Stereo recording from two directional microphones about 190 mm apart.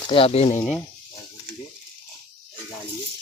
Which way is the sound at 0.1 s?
30° left (ahead or behind).